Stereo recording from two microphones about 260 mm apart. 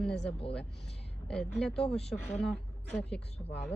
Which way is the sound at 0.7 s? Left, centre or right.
Left.